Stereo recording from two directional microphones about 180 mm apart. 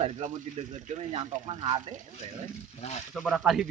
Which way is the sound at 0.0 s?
35° right (ahead or behind).